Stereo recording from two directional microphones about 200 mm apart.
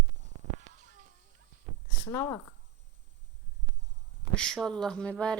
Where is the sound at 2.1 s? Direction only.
15° left (ahead or behind).